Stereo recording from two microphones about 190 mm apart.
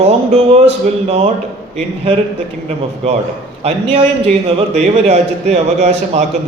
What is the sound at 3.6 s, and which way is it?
Speech, 35° right (ahead or behind).